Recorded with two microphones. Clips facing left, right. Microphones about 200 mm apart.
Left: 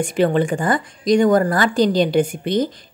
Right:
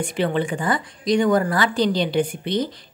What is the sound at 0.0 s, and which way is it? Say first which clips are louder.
Speech: left 5 dB; 45° left (ahead or behind).